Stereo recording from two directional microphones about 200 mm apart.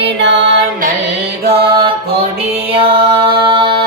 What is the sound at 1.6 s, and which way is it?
Music, 55° right (ahead or behind).